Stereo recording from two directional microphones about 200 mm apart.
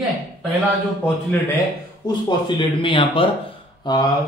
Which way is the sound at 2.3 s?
25° left (ahead or behind).